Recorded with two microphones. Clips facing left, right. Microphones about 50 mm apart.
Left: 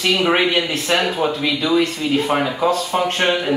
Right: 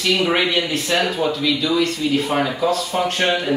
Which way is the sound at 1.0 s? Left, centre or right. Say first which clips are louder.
Even; left.